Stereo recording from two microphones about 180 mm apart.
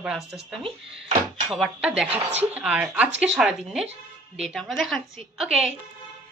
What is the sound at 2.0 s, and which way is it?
Speech, 35° right (ahead or behind).